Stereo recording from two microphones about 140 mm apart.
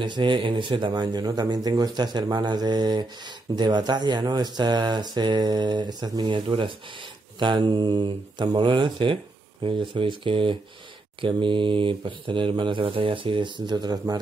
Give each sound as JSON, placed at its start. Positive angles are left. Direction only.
{"t": 0.0, "sound": "speech", "side_deg": -35}